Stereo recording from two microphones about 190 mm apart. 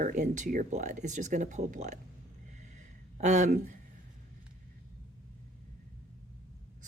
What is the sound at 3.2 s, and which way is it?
Speech, 40° right (ahead or behind).